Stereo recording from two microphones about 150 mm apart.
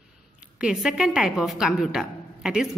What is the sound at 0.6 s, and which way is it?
A woman's voice, 5° right (ahead or behind).